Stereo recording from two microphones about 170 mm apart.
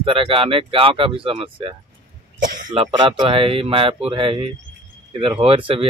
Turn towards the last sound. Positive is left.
turn(degrees=-35)  # may be behind; listen again after turning